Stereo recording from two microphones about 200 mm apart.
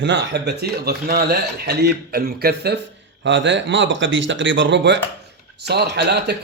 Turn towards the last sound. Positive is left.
turn(degrees=-55)  # may be behind; listen again after turning